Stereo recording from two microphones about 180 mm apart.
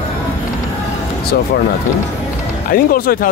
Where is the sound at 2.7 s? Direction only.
55° left (ahead or behind).